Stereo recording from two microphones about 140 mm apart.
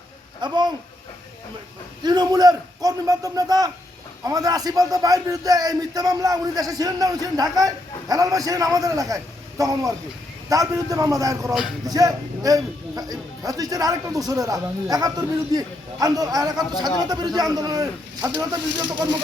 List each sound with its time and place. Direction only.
0.4 s speech: 30° right (ahead or behind)
2.0 s speech: 30° right (ahead or behind)